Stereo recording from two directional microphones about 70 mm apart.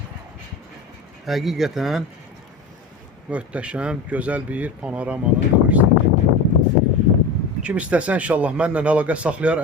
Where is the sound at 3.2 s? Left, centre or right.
Centre.